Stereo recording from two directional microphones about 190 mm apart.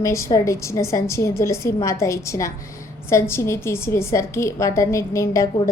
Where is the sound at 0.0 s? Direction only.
15° left (ahead or behind).